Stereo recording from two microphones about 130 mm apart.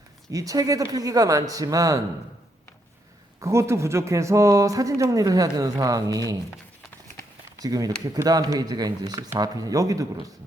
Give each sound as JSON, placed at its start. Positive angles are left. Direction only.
{"t": 0.3, "sound": "speech", "side_deg": -25}
{"t": 3.4, "sound": "speech", "side_deg": -20}
{"t": 7.6, "sound": "speech", "side_deg": -30}